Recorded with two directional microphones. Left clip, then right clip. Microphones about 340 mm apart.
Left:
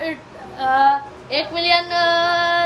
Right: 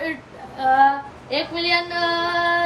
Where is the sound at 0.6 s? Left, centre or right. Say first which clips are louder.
Left 1 dB; centre.